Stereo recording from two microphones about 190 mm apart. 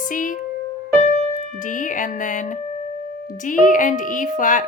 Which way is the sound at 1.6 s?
45° left (ahead or behind).